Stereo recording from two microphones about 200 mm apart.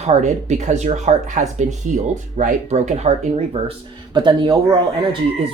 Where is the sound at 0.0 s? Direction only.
35° right (ahead or behind).